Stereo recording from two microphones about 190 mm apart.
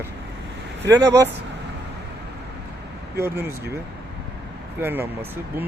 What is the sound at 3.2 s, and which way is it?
Speech, 10° right (ahead or behind).